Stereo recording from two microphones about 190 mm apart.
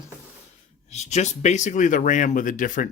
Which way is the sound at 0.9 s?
35° left (ahead or behind).